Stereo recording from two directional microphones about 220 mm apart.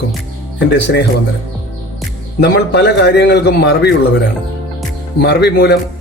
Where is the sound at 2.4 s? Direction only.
50° left (ahead or behind).